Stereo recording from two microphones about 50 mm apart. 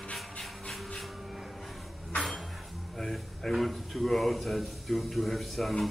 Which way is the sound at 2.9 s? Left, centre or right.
Centre.